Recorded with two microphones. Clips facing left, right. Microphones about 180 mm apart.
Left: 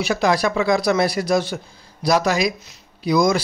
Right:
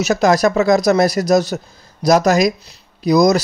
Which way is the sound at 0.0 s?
45° right (ahead or behind).